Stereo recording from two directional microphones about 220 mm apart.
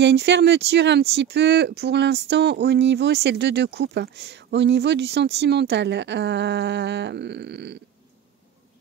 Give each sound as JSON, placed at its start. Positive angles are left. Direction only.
{"t": 0.0, "sound": "speech", "side_deg": -50}